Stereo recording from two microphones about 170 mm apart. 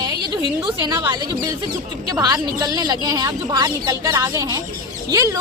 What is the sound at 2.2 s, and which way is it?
Speech, 20° right (ahead or behind).